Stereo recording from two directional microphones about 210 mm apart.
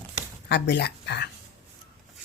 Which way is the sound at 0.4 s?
55° left (ahead or behind).